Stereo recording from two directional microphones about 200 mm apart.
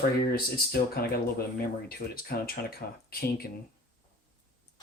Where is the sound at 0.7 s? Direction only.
50° left (ahead or behind).